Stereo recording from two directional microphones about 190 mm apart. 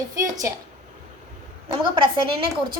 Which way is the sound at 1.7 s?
25° right (ahead or behind).